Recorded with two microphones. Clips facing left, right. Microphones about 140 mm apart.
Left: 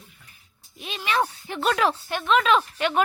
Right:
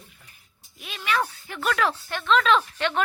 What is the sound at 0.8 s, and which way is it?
Speech, 25° left (ahead or behind).